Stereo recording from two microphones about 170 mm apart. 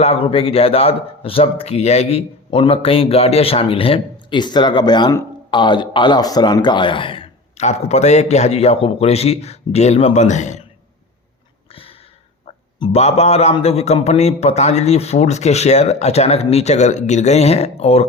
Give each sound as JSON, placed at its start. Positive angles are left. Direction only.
{"t": 0.0, "sound": "speech", "side_deg": 35}
{"t": 11.7, "sound": "a sound", "side_deg": 35}
{"t": 12.8, "sound": "speech", "side_deg": 35}